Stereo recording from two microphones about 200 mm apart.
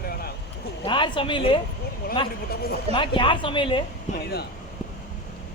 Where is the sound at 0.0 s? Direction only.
50° left (ahead or behind).